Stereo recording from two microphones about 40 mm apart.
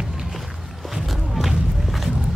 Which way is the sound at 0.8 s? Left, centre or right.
Centre.